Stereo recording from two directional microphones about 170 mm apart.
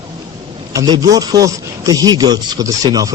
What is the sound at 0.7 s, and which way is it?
A man's voice, 20° right (ahead or behind).